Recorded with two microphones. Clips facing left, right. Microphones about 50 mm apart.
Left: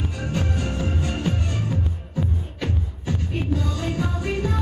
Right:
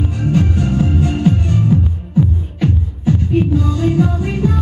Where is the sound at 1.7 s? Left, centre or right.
Centre.